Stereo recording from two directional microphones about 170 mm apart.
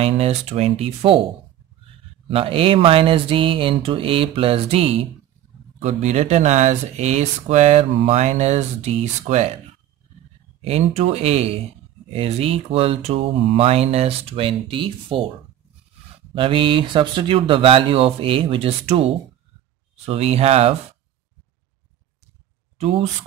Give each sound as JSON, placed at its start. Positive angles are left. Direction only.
{"t": 0.0, "sound": "speech", "side_deg": -40}
{"t": 2.2, "sound": "speech", "side_deg": -35}
{"t": 10.6, "sound": "speech", "side_deg": -40}
{"t": 16.3, "sound": "speech", "side_deg": -30}
{"t": 22.8, "sound": "speech", "side_deg": -35}